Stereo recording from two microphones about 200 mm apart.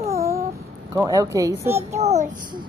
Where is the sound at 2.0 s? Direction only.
35° right (ahead or behind).